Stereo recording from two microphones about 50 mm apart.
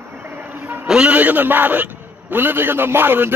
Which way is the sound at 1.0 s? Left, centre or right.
Right.